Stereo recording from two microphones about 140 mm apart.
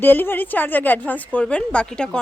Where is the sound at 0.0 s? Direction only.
15° left (ahead or behind).